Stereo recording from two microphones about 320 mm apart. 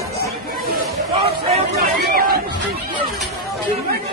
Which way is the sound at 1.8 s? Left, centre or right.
Right.